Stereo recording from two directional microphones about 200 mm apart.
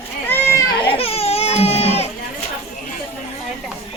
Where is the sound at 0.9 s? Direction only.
30° left (ahead or behind).